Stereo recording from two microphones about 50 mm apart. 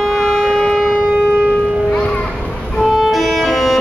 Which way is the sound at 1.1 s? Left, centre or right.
Right.